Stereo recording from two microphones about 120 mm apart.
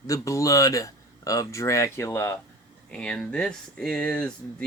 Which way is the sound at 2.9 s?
10° left (ahead or behind).